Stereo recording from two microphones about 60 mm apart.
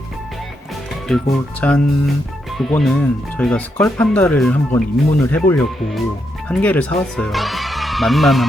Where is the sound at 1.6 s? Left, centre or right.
Centre.